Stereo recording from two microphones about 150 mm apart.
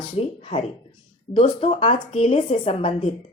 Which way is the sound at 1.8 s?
35° left (ahead or behind).